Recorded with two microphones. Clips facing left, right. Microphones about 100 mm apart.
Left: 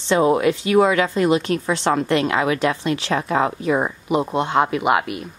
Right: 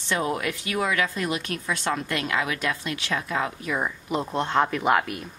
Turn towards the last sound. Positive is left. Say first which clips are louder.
# left 3 dB
turn(degrees=5)  # may be behind; listen again after turning